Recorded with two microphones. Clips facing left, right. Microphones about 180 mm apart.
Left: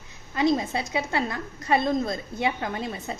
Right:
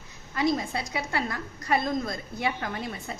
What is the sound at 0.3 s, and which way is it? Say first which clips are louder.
A woman's voice: left 3 dB; 20° left (ahead or behind).